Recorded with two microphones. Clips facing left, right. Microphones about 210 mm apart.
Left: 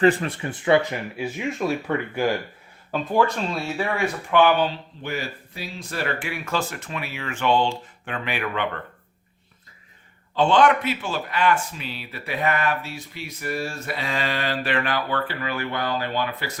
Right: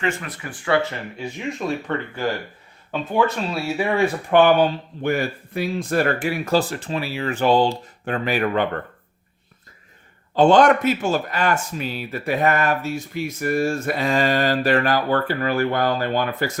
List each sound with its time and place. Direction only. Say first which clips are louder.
0.0 s speech: left 7 dB; 35° left (ahead or behind); by 1.2 s 15° left (ahead or behind)
1.2 s speech: left 1 dB; 5° left (ahead or behind)
2.9 s speech: right 1 dB; centre (ahead or behind)
3.8 s speech: right 6 dB; 20° right (ahead or behind)
4.3 s speech: right 3 dB; 45° right (ahead or behind)
10.3 s speech: right 4 dB; 45° right (ahead or behind)